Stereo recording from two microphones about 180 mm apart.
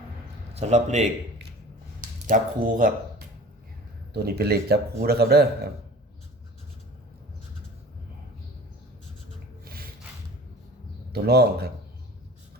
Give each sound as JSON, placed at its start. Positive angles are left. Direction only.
{"t": 0.5, "sound": "a man's voice", "side_deg": -40}
{"t": 4.1, "sound": "speech", "side_deg": -60}
{"t": 9.6, "sound": "rub", "side_deg": -55}
{"t": 11.1, "sound": "speech", "side_deg": -60}